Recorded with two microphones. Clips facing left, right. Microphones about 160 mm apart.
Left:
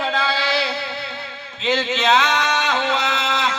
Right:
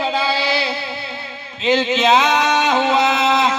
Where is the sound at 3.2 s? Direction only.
45° right (ahead or behind).